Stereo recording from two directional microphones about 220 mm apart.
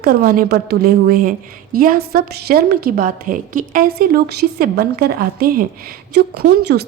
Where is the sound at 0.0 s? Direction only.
40° right (ahead or behind).